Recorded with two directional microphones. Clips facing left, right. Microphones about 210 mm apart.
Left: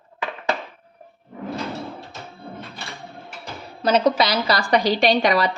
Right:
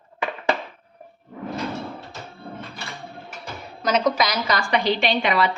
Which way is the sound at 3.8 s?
30° left (ahead or behind).